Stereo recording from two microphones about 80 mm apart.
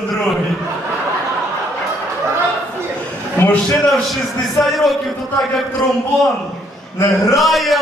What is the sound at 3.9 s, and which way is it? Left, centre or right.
A man's voice, centre.